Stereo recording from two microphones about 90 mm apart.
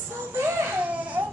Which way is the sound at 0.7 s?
15° right (ahead or behind).